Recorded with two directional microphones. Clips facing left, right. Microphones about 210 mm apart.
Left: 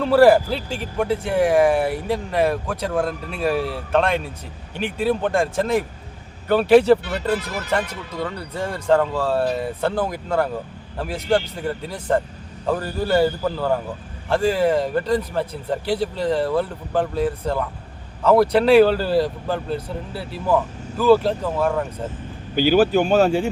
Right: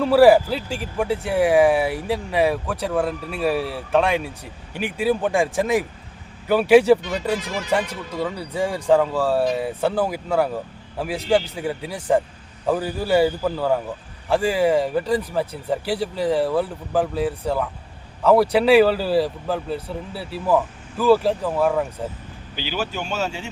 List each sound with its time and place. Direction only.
0.0 s a man's voice: 5° right (ahead or behind)
22.5 s speech: 45° left (ahead or behind)